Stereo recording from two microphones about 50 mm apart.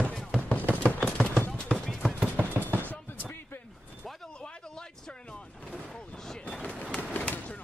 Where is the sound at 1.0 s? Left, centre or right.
Centre.